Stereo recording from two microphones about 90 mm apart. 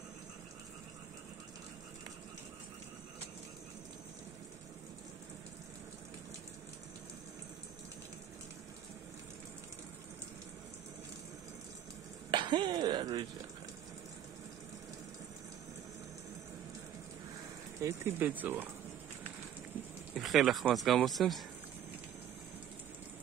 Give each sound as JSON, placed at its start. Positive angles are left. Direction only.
{"t": 12.3, "sound": "a sound", "side_deg": -60}
{"t": 17.7, "sound": "speech", "side_deg": -35}
{"t": 18.2, "sound": "speech", "side_deg": -20}
{"t": 20.2, "sound": "speech", "side_deg": -5}